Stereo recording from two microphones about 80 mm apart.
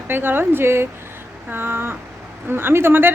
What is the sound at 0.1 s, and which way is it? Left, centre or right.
A woman's voice, right.